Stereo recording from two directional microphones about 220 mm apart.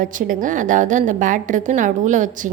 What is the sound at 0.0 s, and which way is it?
A woman's voice, 35° right (ahead or behind).